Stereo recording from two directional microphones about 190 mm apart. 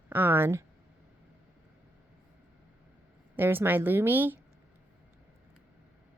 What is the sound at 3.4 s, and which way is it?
Speech, 10° right (ahead or behind).